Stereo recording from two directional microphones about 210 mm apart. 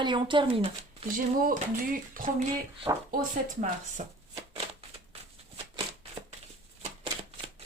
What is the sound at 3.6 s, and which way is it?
Speech, 35° right (ahead or behind).